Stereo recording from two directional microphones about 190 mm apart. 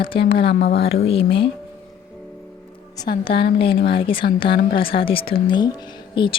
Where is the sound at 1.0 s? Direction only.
30° left (ahead or behind).